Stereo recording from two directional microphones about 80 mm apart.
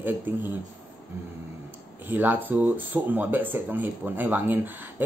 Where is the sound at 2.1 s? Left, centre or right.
Right.